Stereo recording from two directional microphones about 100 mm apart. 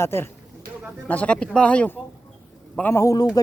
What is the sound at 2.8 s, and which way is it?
Speech, 30° left (ahead or behind).